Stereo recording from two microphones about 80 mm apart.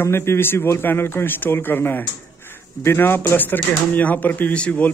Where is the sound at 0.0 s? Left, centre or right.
Left.